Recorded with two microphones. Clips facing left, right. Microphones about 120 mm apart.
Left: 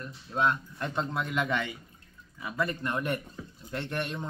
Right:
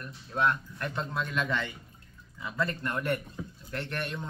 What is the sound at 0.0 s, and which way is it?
Speech, 20° left (ahead or behind).